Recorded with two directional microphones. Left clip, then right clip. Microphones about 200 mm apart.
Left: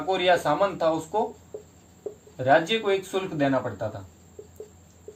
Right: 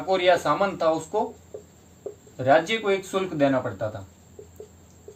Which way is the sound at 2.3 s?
30° right (ahead or behind).